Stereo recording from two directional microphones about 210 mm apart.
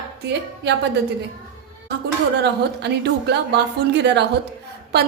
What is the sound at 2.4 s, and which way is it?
A woman's voice, 50° right (ahead or behind).